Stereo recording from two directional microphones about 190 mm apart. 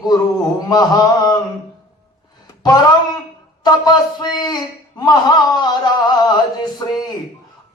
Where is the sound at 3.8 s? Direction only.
20° left (ahead or behind).